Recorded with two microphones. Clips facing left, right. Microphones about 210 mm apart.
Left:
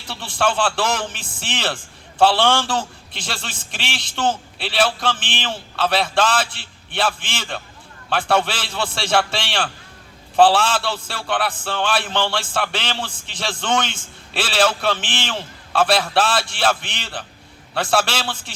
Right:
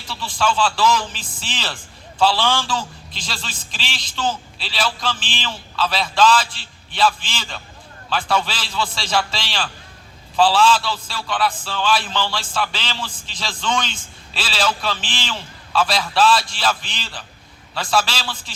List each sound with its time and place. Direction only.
0.1 s a man's voice: 60° left (ahead or behind)